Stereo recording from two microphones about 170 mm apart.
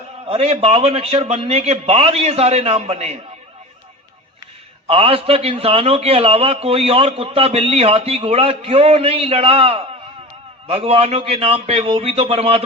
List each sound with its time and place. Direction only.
0.3 s a man's voice: 40° right (ahead or behind)
4.9 s a man's voice: 35° right (ahead or behind)